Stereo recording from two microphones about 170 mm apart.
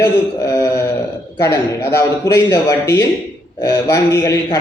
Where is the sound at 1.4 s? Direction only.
15° left (ahead or behind).